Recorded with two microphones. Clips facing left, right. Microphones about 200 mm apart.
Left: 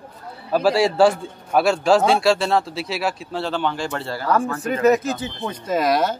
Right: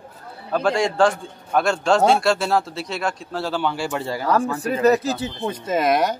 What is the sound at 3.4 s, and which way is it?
Speech, 10° right (ahead or behind).